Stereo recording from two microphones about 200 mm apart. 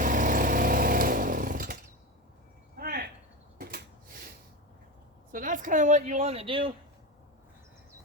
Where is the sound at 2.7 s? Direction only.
50° right (ahead or behind).